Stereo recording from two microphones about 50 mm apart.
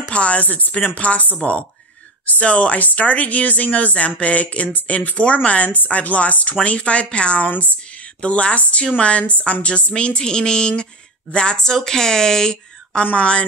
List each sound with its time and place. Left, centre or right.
0.1 s speech: left
2.4 s a woman's voice: left
13.0 s speech: left